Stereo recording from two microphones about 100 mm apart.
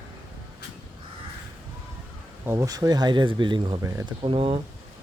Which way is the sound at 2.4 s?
30° right (ahead or behind).